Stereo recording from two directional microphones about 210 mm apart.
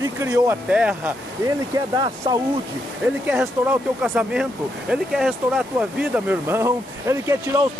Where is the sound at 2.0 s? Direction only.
20° right (ahead or behind).